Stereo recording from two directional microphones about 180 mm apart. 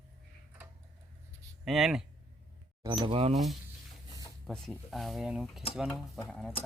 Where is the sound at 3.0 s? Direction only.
35° right (ahead or behind).